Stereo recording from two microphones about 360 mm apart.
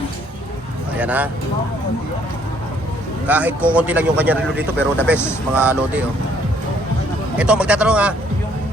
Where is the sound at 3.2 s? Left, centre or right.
Centre.